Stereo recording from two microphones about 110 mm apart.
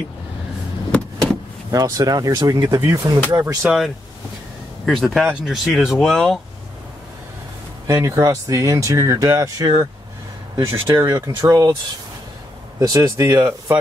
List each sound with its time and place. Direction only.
1.7 s speech: 35° right (ahead or behind)
3.6 s speech: centre (ahead or behind)
7.8 s speech: 30° right (ahead or behind)
12.7 s speech: 30° right (ahead or behind)